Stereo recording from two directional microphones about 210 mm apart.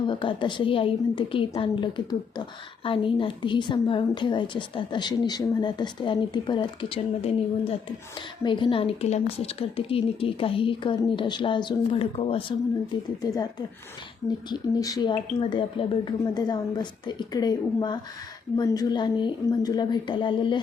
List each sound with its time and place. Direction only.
0.1 s a woman's voice: 25° left (ahead or behind)
8.4 s a woman's voice: 20° left (ahead or behind)